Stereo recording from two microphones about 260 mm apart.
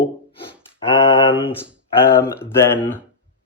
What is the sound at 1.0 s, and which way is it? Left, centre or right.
Mantra, centre.